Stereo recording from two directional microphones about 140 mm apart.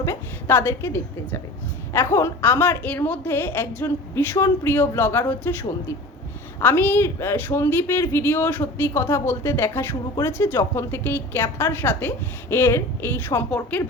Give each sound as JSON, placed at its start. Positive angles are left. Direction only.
{"t": 0.0, "sound": "speech", "side_deg": 20}